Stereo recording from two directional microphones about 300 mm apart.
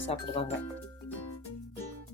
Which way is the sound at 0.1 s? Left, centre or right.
Centre.